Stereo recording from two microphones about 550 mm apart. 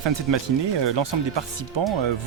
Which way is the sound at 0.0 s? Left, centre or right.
Right.